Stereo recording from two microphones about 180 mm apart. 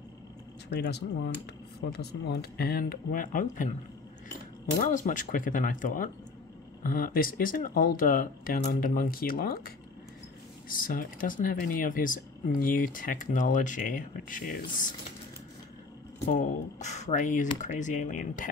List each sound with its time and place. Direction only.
0.7 s speech: 70° left (ahead or behind); by 3.7 s 50° left (ahead or behind)
4.7 s speech: 50° left (ahead or behind)
10.7 s speech: 50° left (ahead or behind)
16.3 s speech: 40° left (ahead or behind)